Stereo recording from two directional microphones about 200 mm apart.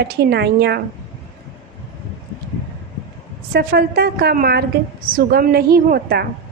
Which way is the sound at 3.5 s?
50° right (ahead or behind).